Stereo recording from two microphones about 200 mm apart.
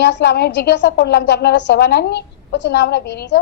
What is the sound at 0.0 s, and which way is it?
A woman's voice, 60° left (ahead or behind).